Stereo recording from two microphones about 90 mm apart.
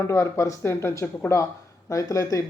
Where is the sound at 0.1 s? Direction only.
35° left (ahead or behind).